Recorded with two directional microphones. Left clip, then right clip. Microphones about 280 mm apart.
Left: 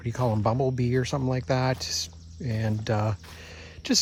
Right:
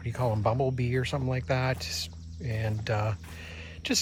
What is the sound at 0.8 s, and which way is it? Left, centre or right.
Speech, left.